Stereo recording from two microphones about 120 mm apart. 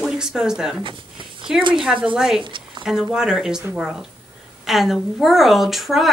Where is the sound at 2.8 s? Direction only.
5° right (ahead or behind).